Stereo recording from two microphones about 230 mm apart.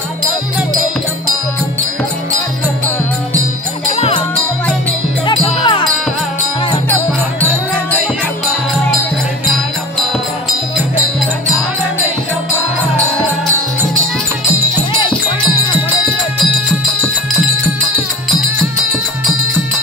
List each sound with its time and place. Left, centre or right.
3.9 s music: left
5.2 s wind chime: centre